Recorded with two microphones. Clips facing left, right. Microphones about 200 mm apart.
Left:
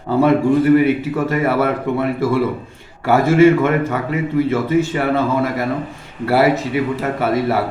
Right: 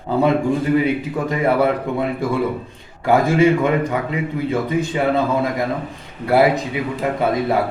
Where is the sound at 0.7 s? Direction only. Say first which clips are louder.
Left 4 dB; 15° right (ahead or behind).